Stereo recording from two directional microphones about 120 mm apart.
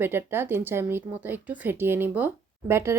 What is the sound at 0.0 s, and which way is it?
Speech, 20° right (ahead or behind).